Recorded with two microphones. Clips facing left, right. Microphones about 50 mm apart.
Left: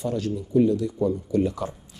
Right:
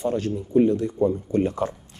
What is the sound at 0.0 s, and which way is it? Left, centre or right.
Speech, right.